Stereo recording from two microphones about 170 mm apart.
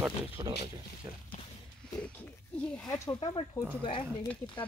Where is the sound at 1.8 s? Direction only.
5° left (ahead or behind).